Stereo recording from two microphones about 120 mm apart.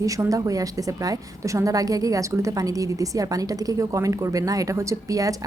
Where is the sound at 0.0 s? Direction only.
30° right (ahead or behind).